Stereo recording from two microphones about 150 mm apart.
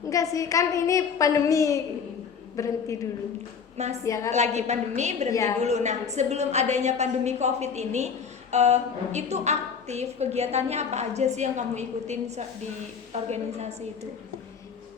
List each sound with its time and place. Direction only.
0.1 s a woman's voice: 20° left (ahead or behind)
3.8 s a woman's voice: 50° right (ahead or behind)
4.0 s a woman's voice: 20° left (ahead or behind)
4.3 s a woman's voice: 50° right (ahead or behind)
5.3 s a woman's voice: 20° left (ahead or behind)
5.5 s a woman's voice: 50° right (ahead or behind)